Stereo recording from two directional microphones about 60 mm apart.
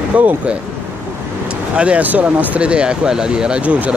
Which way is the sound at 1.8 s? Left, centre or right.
Right.